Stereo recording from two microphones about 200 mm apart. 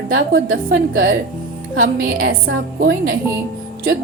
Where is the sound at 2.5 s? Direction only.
55° right (ahead or behind).